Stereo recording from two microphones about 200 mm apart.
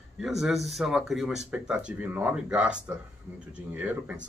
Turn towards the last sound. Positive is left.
turn(degrees=-5)  # may be behind; listen again after turning